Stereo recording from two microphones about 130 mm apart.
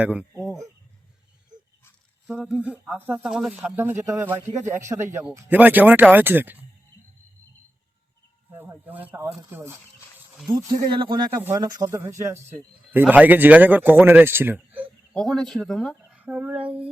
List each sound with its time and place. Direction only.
0.0 s speech: 10° right (ahead or behind)
2.4 s speech: 5° right (ahead or behind)
8.5 s speech: 15° right (ahead or behind)
10.9 s speech: 40° right (ahead or behind)
11.3 s speech: 20° right (ahead or behind)
15.1 s speech: 5° left (ahead or behind)
16.1 s female singing: 10° right (ahead or behind)